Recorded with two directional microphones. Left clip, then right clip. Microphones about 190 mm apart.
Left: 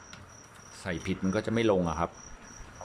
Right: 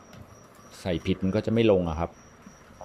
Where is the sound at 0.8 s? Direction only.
15° right (ahead or behind).